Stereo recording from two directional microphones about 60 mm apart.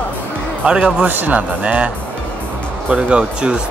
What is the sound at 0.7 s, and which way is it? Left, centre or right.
Speech, centre.